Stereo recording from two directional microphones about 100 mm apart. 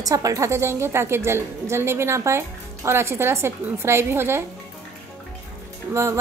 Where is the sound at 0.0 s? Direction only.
35° right (ahead or behind).